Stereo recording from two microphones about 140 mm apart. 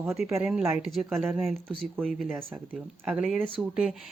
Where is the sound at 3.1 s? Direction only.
5° right (ahead or behind).